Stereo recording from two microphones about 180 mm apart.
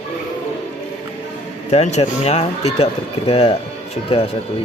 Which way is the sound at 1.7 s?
35° left (ahead or behind).